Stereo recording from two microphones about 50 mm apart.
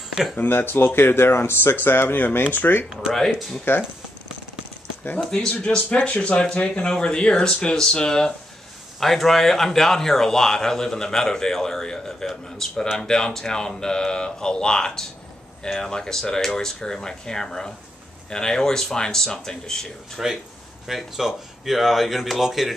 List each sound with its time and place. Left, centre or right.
0.1 s speech: centre
0.4 s speech: left
3.1 s speech: centre
5.2 s a man's voice: centre
5.5 s a man's voice: left
20.2 s speech: centre